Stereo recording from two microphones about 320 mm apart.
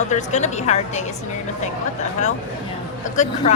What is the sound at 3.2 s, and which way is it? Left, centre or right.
Speech, left.